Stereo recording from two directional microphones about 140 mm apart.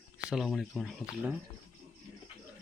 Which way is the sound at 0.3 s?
5° right (ahead or behind).